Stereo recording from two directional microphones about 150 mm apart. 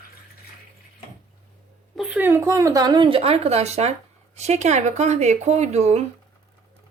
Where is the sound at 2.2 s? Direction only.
20° right (ahead or behind); by 6.0 s 45° right (ahead or behind).